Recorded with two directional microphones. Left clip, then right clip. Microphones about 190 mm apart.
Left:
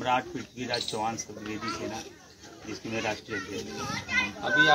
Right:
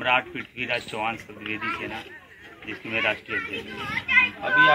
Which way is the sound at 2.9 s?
15° left (ahead or behind).